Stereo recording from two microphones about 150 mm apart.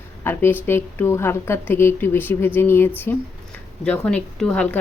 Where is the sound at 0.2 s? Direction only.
15° left (ahead or behind).